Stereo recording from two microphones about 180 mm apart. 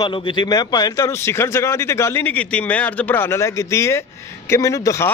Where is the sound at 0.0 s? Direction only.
25° left (ahead or behind).